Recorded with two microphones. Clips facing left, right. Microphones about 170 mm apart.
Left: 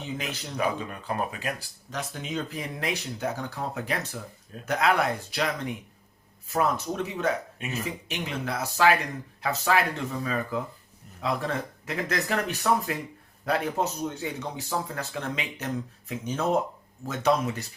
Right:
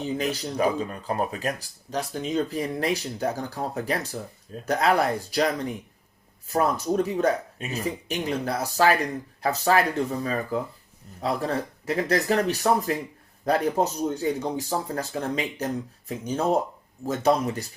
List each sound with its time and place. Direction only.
0.0 s speech: 35° right (ahead or behind)